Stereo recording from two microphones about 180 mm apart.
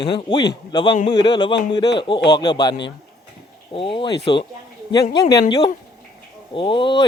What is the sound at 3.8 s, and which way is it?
Speech, 30° left (ahead or behind).